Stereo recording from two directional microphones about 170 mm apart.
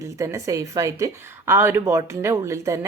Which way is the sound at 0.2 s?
20° right (ahead or behind).